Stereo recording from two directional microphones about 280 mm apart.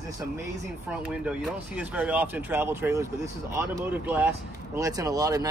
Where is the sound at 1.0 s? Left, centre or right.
Centre.